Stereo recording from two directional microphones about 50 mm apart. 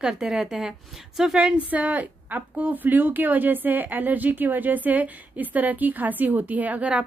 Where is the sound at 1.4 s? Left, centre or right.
Right.